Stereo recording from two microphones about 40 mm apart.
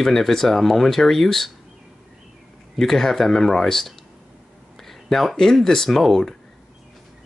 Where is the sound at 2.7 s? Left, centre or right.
Centre.